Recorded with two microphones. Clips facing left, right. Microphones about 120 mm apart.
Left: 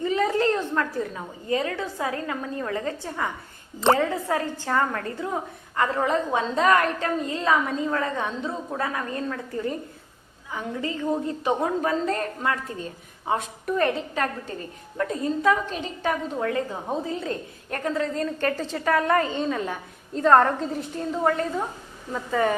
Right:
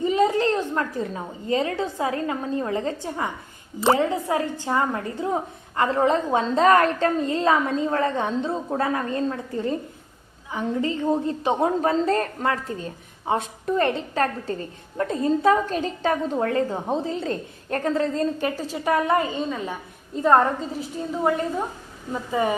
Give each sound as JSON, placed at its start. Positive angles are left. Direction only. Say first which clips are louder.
{"t": 0.0, "sound": "a sound", "louder": "right 2 dB", "side_deg": -20}
{"t": 1.1, "sound": "a woman's voice", "louder": "right 2 dB", "side_deg": -30}
{"t": 18.3, "sound": "a woman's voice", "louder": "even", "side_deg": -10}
{"t": 22.1, "sound": "a woman's voice", "louder": "even", "side_deg": -15}